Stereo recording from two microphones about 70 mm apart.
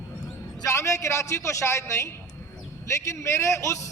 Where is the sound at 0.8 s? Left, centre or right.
Left.